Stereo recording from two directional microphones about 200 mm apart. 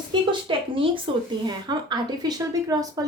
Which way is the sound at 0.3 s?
25° right (ahead or behind).